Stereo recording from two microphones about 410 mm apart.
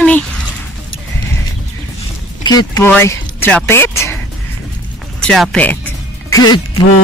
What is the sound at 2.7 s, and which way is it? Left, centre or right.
Speech, centre.